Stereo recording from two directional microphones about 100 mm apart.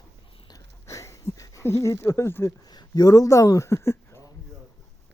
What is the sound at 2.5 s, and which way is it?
Speech, 40° left (ahead or behind).